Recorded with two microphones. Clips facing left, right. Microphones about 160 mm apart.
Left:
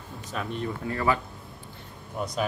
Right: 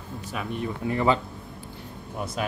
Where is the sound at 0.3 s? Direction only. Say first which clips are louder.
Even; 10° right (ahead or behind).